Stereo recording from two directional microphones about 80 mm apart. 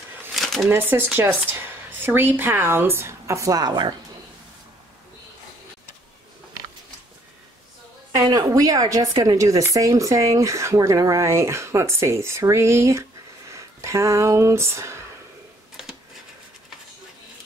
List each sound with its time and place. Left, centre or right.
0.3 s a sound: centre
0.7 s speech: right
8.1 s speech: right